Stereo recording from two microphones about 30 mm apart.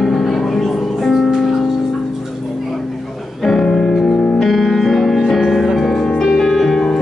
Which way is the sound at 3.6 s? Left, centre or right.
Left.